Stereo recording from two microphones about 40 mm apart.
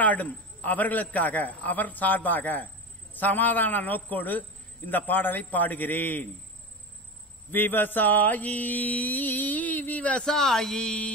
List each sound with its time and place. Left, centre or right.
0.0 s a man's voice: left
7.5 s a man's voice: left
10.2 s speech: centre
10.8 s speech: left